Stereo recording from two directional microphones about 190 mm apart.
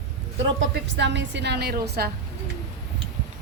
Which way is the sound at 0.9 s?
65° right (ahead or behind).